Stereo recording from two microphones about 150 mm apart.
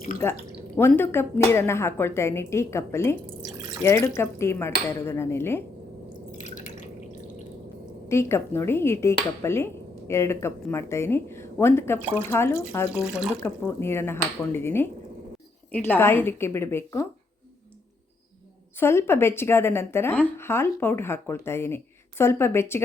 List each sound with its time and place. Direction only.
0.8 s a woman's voice: 15° left (ahead or behind)
6.4 s drip: 55° left (ahead or behind)
8.0 s a woman's voice: 20° left (ahead or behind)
13.0 s speech: 5° right (ahead or behind)
13.4 s a woman's voice: 15° left (ahead or behind)
18.8 s a woman's voice: 15° left (ahead or behind)